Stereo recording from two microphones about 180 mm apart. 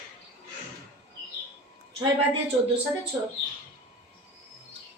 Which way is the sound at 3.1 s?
15° right (ahead or behind).